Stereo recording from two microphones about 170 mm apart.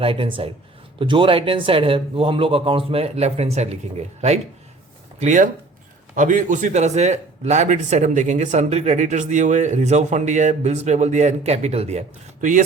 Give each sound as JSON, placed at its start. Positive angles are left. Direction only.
{"t": 0.0, "sound": "speech", "side_deg": -30}
{"t": 5.2, "sound": "a man's voice", "side_deg": -45}